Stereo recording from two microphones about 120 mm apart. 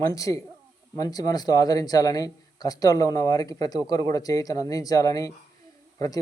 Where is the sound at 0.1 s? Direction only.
25° left (ahead or behind).